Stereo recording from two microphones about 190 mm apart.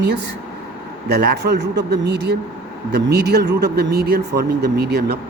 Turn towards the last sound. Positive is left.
turn(degrees=-60)  # may be behind; listen again after turning